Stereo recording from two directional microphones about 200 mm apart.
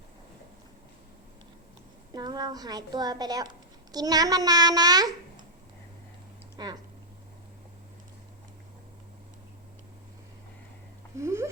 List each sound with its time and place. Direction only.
2.1 s a child's voice: 20° right (ahead or behind)
6.6 s a child's voice: 20° right (ahead or behind)
11.2 s a sound: 15° right (ahead or behind)